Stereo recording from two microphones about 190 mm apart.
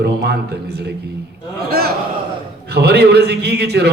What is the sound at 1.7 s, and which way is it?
A man's voice, 55° right (ahead or behind).